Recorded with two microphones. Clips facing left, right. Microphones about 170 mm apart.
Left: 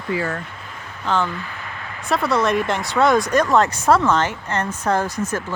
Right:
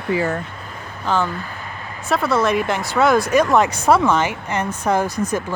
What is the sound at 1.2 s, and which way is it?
Speech, 40° right (ahead or behind).